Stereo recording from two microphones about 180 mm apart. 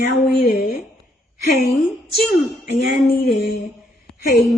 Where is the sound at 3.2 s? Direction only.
65° left (ahead or behind).